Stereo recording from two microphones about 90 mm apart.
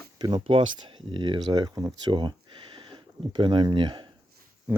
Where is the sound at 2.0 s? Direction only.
60° right (ahead or behind).